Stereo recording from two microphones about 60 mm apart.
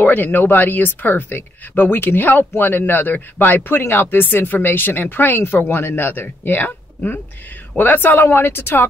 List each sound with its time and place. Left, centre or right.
0.0 s speech: left